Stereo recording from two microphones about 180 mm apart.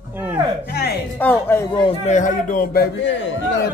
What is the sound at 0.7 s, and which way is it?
Speech, 65° left (ahead or behind).